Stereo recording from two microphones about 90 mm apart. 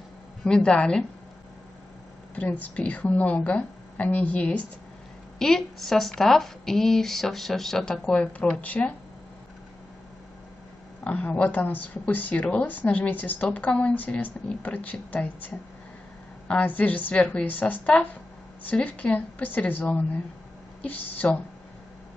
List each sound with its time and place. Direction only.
0.4 s speech: 10° left (ahead or behind)
2.6 s speech: 15° left (ahead or behind)
5.4 s speech: 5° left (ahead or behind)
11.1 s speech: 15° left (ahead or behind)